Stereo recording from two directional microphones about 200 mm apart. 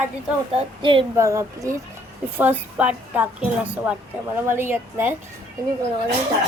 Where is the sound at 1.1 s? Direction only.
15° right (ahead or behind).